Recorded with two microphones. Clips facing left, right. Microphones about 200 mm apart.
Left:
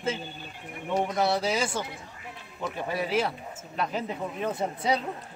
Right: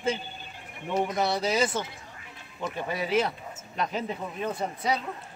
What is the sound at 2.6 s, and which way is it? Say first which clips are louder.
Speech: left 1 dB; 5° left (ahead or behind).